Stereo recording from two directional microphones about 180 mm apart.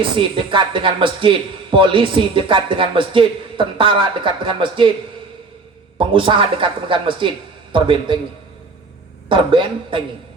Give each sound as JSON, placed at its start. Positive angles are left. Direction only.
{"t": 0.2, "sound": "a man's voice", "side_deg": -25}
{"t": 6.0, "sound": "a man's voice", "side_deg": -30}
{"t": 9.3, "sound": "a man's voice", "side_deg": -30}